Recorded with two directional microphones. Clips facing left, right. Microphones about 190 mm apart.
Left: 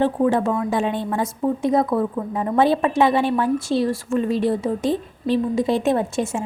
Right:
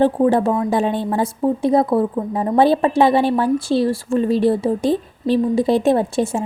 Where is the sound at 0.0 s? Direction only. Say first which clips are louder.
Right 4 dB; 35° right (ahead or behind).